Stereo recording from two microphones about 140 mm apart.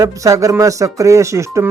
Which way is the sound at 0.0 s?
25° right (ahead or behind).